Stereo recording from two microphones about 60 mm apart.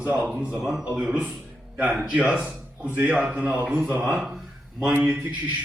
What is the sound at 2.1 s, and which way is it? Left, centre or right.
Speech, centre.